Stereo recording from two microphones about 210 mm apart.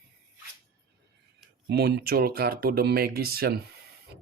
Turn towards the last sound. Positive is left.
turn(degrees=-45)  # may be behind; listen again after turning